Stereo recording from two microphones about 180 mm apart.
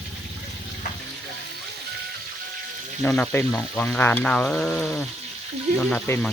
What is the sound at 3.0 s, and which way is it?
Frying, 10° left (ahead or behind).